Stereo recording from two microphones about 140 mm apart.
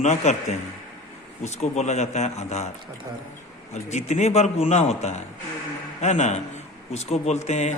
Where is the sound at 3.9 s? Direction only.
55° left (ahead or behind).